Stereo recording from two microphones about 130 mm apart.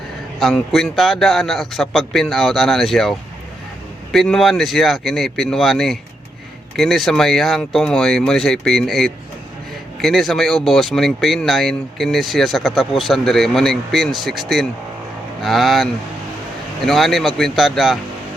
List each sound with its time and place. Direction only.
0.3 s speech: centre (ahead or behind)